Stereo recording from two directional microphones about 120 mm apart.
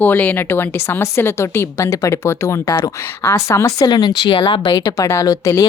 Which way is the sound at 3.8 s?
35° left (ahead or behind).